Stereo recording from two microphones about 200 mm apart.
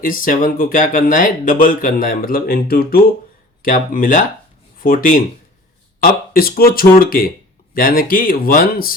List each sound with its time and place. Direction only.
0.0 s speech: 45° left (ahead or behind)